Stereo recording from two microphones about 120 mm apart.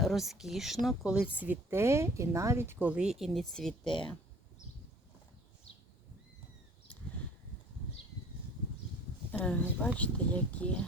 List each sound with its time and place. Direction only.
0.0 s speech: centre (ahead or behind)
3.8 s speech: 45° left (ahead or behind)
9.4 s speech: 10° left (ahead or behind)